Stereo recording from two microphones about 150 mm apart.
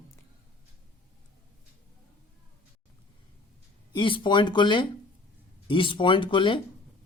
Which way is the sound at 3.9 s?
35° left (ahead or behind).